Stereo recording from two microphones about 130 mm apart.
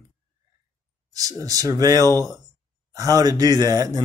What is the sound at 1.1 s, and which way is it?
Speech, 25° right (ahead or behind).